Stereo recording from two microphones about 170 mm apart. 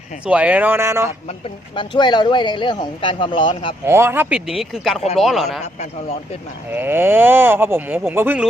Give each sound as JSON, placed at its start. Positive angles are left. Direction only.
{"t": 0.3, "sound": "speech", "side_deg": -10}
{"t": 1.7, "sound": "speech", "side_deg": 30}
{"t": 3.8, "sound": "speech", "side_deg": -15}
{"t": 6.7, "sound": "speech", "side_deg": -10}